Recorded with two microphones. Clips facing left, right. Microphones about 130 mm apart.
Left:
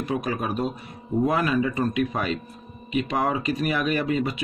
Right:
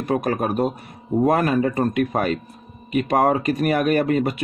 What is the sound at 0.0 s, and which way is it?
Speech, 50° right (ahead or behind).